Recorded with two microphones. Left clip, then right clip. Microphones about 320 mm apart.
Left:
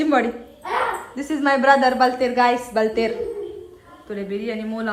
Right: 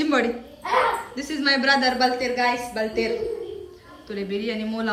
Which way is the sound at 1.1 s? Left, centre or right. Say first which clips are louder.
Left 3 dB; centre.